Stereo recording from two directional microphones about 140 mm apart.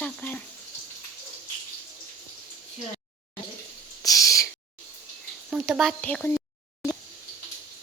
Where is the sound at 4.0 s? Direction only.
25° left (ahead or behind).